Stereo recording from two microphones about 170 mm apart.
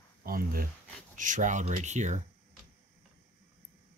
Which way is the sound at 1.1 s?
50° right (ahead or behind).